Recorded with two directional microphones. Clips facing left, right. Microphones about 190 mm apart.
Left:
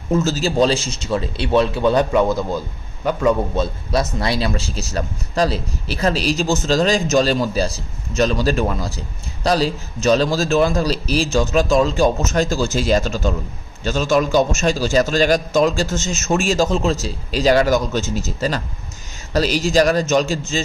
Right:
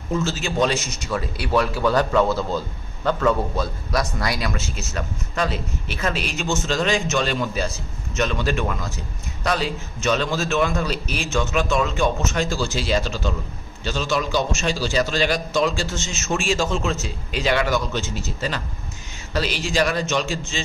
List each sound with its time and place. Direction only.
0.1 s a man's voice: 40° left (ahead or behind); by 3.3 s 15° left (ahead or behind)
3.5 s a man's voice: 25° left (ahead or behind); by 20.6 s 40° left (ahead or behind)